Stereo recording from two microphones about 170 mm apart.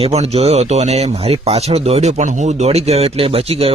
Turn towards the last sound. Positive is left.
turn(degrees=-35)  # may be behind; listen again after turning